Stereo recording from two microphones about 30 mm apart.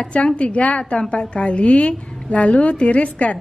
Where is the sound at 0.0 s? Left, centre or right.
Left.